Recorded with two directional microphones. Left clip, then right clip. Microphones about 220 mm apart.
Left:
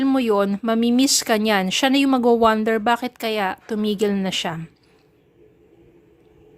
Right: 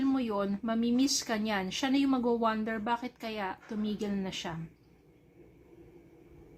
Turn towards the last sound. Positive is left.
turn(degrees=45)  # may be behind; listen again after turning